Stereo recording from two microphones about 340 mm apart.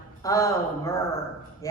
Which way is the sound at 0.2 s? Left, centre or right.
Centre.